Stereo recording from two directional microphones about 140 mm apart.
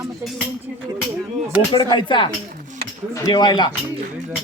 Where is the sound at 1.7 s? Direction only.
35° left (ahead or behind).